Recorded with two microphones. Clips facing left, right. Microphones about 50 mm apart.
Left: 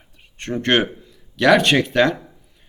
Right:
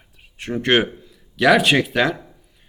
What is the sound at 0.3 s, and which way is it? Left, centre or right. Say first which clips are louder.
A man's voice: right 1 dB; centre.